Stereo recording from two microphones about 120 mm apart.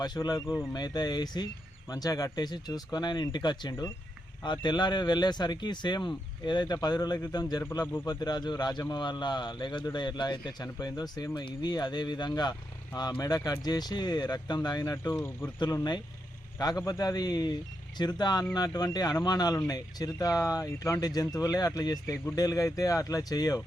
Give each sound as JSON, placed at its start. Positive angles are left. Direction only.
{"t": 0.0, "sound": "speech", "side_deg": 35}
{"t": 15.0, "sound": "speech", "side_deg": 20}
{"t": 15.5, "sound": "speech", "side_deg": 35}